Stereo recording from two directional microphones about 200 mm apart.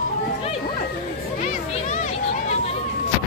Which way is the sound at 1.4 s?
35° left (ahead or behind).